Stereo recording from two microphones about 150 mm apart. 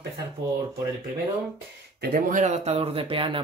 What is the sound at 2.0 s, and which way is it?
Speech, 70° right (ahead or behind).